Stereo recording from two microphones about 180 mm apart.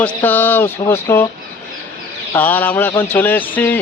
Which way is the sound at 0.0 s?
10° left (ahead or behind).